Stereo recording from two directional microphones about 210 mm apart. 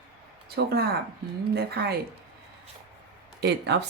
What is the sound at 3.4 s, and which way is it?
Speech, 55° right (ahead or behind).